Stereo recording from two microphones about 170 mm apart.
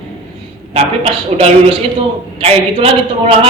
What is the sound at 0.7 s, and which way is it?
Speech, 35° right (ahead or behind).